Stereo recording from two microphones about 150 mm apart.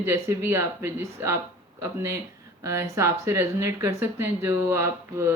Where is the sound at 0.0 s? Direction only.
15° right (ahead or behind).